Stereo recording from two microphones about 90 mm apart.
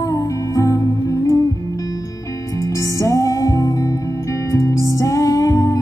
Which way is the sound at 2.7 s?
35° left (ahead or behind).